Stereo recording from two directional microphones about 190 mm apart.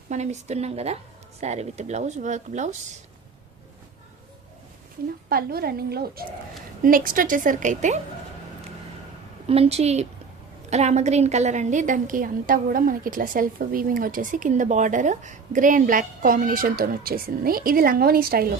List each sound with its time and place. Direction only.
0.1 s speech: 35° right (ahead or behind)
5.3 s a woman's voice: 55° right (ahead or behind)
9.5 s a woman's voice: 35° right (ahead or behind); by 18.5 s 50° right (ahead or behind)